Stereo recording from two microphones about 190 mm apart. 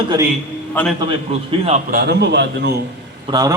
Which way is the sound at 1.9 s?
60° right (ahead or behind).